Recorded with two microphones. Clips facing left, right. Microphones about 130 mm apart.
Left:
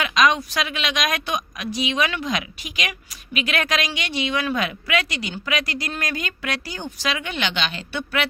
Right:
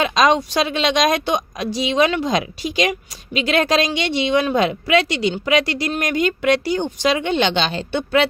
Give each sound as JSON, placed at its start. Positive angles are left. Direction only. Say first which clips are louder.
{"t": 0.0, "sound": "a woman's voice", "louder": "right 4 dB", "side_deg": -30}